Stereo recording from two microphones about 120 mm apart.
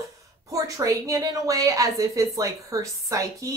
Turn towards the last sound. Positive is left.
turn(degrees=-25)  # may be behind; listen again after turning